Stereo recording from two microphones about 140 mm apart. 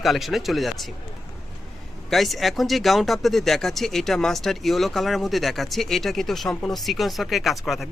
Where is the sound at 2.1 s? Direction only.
Centre (ahead or behind).